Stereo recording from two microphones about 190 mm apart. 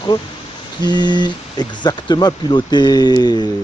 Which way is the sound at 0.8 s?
20° left (ahead or behind).